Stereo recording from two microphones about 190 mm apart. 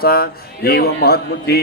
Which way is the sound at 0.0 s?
55° left (ahead or behind).